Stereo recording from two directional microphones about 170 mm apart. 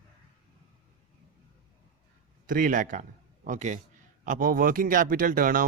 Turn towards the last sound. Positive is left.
turn(degrees=-55)  # may be behind; listen again after turning